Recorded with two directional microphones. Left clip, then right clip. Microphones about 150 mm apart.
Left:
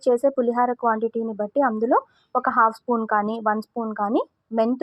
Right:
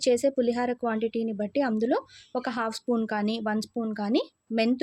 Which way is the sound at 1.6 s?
20° right (ahead or behind).